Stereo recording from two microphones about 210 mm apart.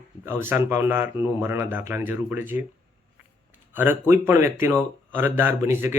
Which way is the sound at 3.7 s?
10° right (ahead or behind).